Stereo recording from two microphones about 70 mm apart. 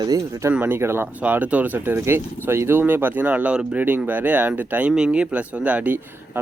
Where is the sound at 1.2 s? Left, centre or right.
Right.